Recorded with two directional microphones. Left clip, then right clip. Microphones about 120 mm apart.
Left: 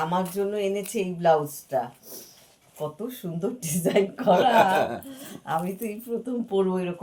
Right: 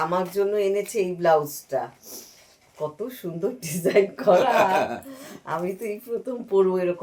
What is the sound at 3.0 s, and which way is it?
Speech, 30° right (ahead or behind).